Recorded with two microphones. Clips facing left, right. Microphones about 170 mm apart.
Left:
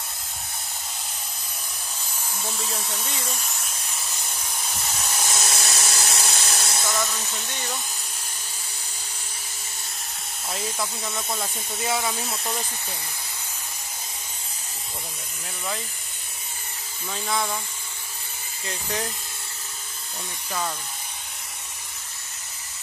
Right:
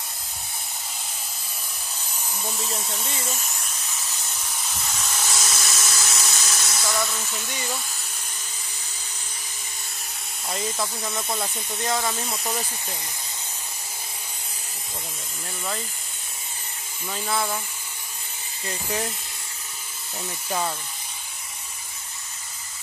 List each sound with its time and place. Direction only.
2.3 s speech: 10° right (ahead or behind)
5.0 s a sound: 15° left (ahead or behind)
5.5 s dental drill: 35° left (ahead or behind)
7.0 s speech: 5° right (ahead or behind)
10.5 s speech: centre (ahead or behind)
17.1 s speech: 5° right (ahead or behind)
18.7 s speech: 5° right (ahead or behind)